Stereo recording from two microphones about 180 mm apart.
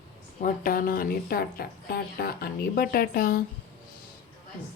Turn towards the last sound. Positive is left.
turn(degrees=50)  # may be behind; listen again after turning